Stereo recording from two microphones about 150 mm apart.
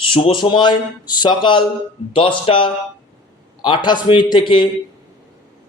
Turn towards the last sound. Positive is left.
turn(degrees=30)  # may be behind; listen again after turning